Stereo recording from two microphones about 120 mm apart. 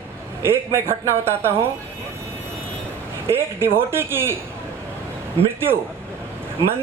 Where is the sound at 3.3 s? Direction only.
20° right (ahead or behind).